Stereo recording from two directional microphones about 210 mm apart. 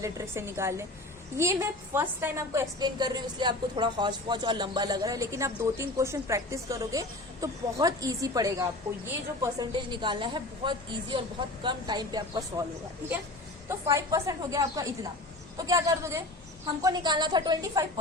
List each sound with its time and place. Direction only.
0.0 s a woman's voice: 15° right (ahead or behind)
13.7 s a woman's voice: 15° right (ahead or behind)